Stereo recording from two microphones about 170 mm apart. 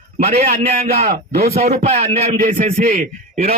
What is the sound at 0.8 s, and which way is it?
Speech, 70° right (ahead or behind).